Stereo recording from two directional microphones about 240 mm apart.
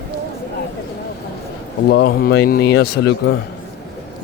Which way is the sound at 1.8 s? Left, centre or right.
Left.